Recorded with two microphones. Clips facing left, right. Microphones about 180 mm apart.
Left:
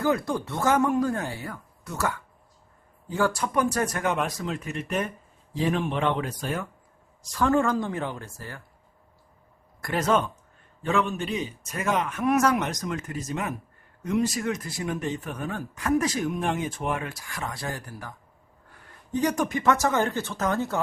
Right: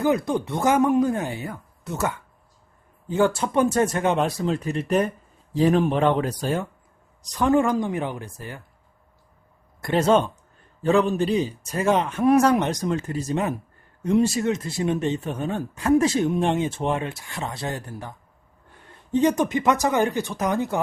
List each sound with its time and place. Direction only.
0.0 s a man's voice: 20° right (ahead or behind)
7.2 s speech: 20° right (ahead or behind)
9.8 s a man's voice: 25° right (ahead or behind)